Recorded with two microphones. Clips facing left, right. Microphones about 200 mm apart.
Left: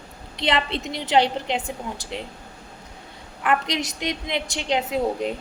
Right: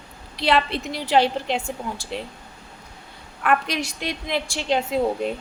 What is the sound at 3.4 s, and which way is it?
A woman's voice, 20° left (ahead or behind).